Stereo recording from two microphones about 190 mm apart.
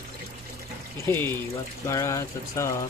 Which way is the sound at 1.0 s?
10° left (ahead or behind).